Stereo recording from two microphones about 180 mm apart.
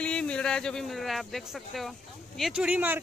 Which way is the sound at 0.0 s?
5° left (ahead or behind).